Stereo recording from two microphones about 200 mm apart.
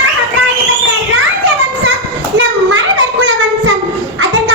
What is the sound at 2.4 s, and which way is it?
Child singing, 70° right (ahead or behind).